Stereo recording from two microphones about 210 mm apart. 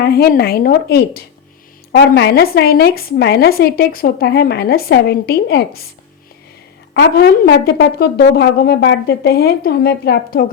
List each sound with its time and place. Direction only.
0.0 s a woman's voice: 45° left (ahead or behind)
6.9 s a woman's voice: 50° left (ahead or behind)